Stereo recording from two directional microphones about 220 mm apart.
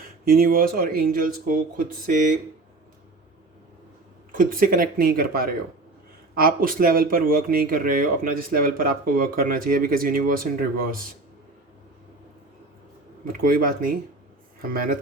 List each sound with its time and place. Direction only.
0.3 s speech: 40° right (ahead or behind)
4.4 s speech: 40° right (ahead or behind)
13.2 s speech: 40° right (ahead or behind)